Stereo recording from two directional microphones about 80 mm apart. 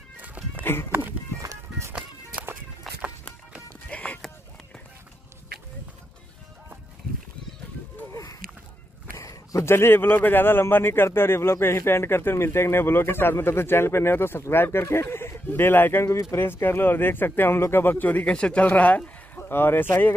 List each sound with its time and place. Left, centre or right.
0.2 s music: centre
1.4 s music: right
2.9 s music: centre
3.9 s a sound: centre
8.1 s a sound: left
9.7 s a man's voice: left